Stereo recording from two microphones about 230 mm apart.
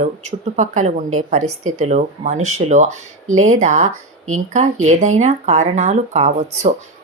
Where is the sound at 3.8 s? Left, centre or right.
Right.